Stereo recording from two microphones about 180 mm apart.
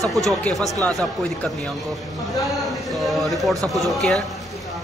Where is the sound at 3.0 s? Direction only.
Centre (ahead or behind).